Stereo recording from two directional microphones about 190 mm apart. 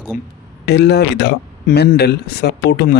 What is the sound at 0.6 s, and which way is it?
Speech, 65° left (ahead or behind).